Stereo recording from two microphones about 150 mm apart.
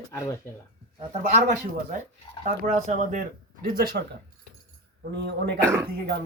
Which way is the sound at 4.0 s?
90° right.